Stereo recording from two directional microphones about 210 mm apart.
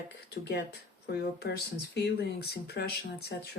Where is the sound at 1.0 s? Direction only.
50° left (ahead or behind).